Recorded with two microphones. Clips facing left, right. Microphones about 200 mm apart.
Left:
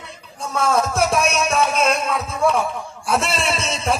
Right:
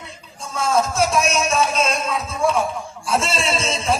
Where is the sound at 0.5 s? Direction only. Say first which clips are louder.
Even; 60° left (ahead or behind).